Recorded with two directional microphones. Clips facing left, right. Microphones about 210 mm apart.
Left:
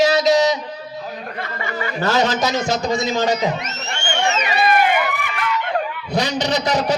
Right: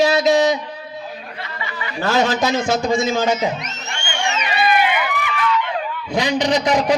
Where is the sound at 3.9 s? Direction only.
40° left (ahead or behind).